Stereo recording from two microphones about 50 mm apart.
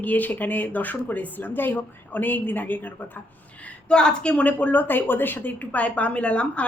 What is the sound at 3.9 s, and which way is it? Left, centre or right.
A woman's voice, centre.